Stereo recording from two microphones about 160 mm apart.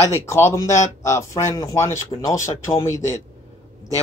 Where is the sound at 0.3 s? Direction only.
20° left (ahead or behind).